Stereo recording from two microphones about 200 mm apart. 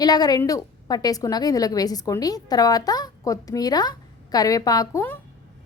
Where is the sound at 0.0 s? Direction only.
20° left (ahead or behind).